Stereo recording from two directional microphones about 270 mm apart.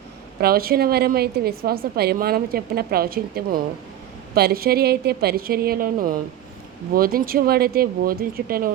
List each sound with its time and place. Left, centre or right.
0.4 s a woman's voice: right